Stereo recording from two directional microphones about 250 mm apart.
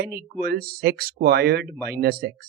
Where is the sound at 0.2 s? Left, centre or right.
Right.